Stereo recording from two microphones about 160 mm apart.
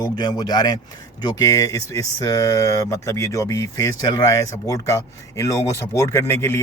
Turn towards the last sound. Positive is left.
turn(degrees=15)  # may be behind; listen again after turning